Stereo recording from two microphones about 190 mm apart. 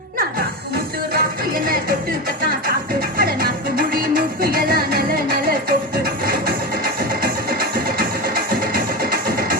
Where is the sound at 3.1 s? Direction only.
50° right (ahead or behind).